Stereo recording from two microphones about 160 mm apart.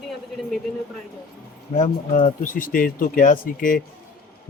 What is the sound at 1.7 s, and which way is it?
Speech, 50° left (ahead or behind).